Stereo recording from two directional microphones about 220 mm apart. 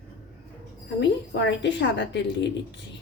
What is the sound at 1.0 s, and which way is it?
A woman's voice, 55° left (ahead or behind).